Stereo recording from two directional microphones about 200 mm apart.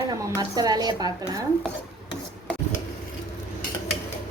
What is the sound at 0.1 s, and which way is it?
A woman's voice, 20° right (ahead or behind).